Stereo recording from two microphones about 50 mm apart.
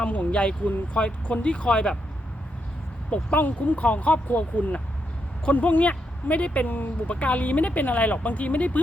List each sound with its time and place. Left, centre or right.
0.0 s speech: left
3.3 s speech: left